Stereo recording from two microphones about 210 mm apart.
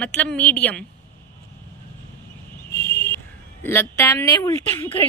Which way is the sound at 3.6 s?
10° left (ahead or behind).